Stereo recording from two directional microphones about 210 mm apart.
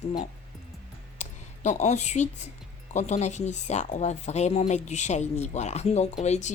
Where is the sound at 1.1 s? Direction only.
35° left (ahead or behind).